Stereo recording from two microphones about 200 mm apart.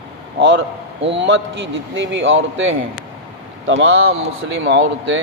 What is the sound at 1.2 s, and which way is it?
A man's voice, 65° right (ahead or behind).